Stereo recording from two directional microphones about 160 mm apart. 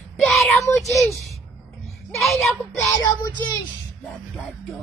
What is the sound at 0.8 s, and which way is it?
A woman's voice, centre (ahead or behind).